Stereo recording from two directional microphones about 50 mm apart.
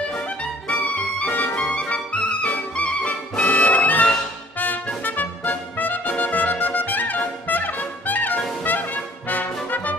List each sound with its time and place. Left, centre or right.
0.4 s music: left
5.0 s trumpet: left
8.6 s brass instrument: left
9.7 s music: left